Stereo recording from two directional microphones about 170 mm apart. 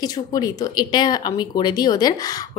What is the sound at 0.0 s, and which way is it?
Speech, 20° left (ahead or behind).